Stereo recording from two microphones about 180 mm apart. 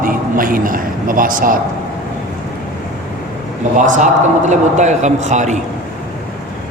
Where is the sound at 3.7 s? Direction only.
45° right (ahead or behind).